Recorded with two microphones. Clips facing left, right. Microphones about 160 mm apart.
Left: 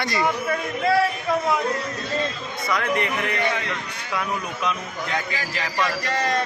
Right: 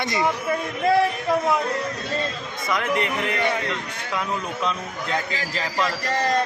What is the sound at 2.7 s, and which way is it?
Speech, 20° right (ahead or behind).